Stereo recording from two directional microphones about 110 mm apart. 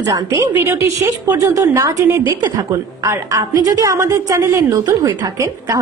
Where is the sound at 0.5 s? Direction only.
20° right (ahead or behind).